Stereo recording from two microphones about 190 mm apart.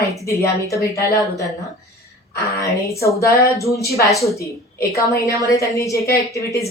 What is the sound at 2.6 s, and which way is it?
A woman's voice, 15° left (ahead or behind).